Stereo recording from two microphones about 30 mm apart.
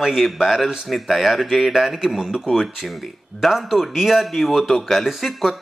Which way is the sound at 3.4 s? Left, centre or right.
Centre.